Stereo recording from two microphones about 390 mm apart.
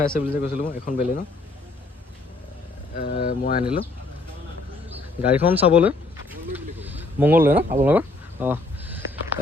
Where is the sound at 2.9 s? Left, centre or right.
Left.